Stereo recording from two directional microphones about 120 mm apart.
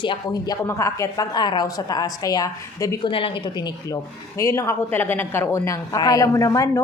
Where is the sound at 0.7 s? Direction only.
25° left (ahead or behind).